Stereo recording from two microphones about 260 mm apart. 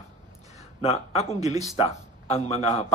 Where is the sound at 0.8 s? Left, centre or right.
Left.